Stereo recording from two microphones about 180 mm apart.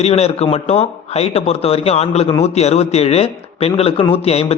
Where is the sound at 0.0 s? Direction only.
35° left (ahead or behind).